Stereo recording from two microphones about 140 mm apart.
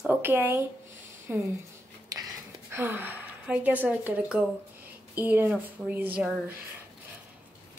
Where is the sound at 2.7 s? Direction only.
15° right (ahead or behind).